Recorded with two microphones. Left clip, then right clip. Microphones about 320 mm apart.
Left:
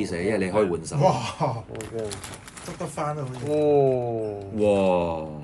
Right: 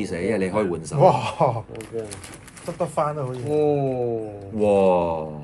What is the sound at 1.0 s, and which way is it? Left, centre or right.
Speech, centre.